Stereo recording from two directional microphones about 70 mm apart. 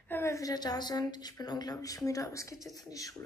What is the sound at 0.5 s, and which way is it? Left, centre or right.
Speech, left.